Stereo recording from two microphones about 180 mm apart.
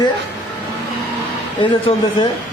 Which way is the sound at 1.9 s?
30° left (ahead or behind).